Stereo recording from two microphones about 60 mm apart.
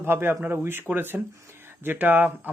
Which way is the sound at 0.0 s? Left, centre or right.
Right.